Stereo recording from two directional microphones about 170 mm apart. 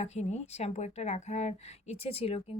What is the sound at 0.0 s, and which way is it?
Speech, 40° left (ahead or behind).